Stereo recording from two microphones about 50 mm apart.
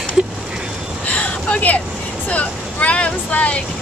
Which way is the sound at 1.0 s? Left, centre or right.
Left.